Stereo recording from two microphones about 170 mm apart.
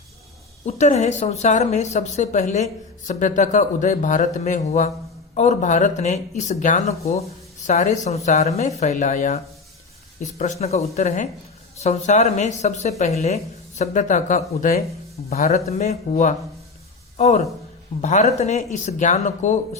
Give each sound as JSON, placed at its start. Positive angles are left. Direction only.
{"t": 0.6, "sound": "a woman's voice", "side_deg": 40}